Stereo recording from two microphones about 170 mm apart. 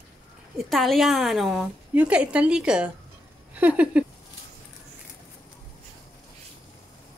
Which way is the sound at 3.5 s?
10° right (ahead or behind).